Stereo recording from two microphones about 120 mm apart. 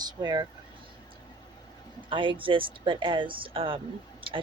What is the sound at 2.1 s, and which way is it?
A woman's voice, 45° right (ahead or behind).